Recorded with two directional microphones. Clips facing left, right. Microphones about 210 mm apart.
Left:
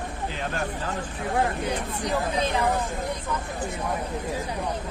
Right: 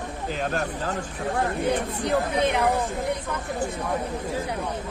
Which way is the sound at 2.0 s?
60° right (ahead or behind).